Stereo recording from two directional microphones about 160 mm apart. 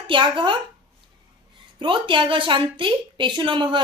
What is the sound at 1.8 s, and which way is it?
A woman's voice, 30° right (ahead or behind).